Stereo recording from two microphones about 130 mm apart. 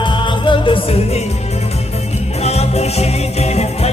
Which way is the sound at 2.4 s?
55° left (ahead or behind).